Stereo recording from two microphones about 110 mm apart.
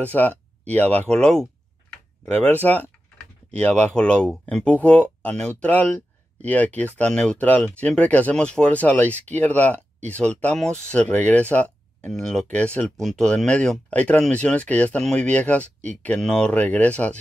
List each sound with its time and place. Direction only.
0.0 s speech: 15° left (ahead or behind)
2.3 s speech: 15° left (ahead or behind)